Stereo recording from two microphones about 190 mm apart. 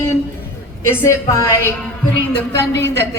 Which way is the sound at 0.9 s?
15° left (ahead or behind).